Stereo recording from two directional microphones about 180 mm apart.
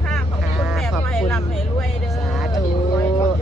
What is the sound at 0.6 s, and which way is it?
Speech, centre (ahead or behind).